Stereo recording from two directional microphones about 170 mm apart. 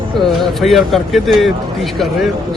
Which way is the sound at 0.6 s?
Centre (ahead or behind).